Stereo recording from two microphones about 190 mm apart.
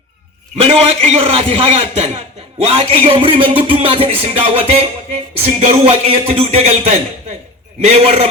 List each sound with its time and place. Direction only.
0.5 s a man's voice: 35° right (ahead or behind)